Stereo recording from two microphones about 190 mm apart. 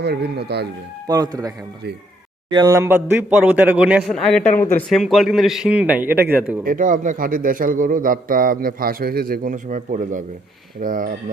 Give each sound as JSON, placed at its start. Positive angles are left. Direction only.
{"t": 0.0, "sound": "speech", "side_deg": -60}
{"t": 1.0, "sound": "a man's voice", "side_deg": -20}
{"t": 6.7, "sound": "a man's voice", "side_deg": -45}